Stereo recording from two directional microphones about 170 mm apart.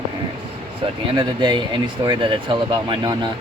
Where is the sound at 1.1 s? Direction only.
25° right (ahead or behind).